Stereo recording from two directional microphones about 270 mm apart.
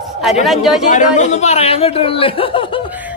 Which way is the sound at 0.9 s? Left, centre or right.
Left.